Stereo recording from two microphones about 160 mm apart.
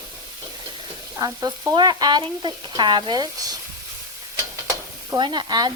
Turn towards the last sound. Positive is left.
turn(degrees=-25)  # may be behind; listen again after turning